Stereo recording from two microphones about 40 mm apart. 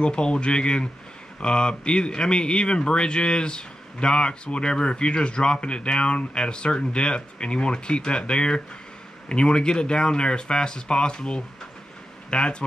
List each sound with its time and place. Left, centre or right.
0.0 s speech: left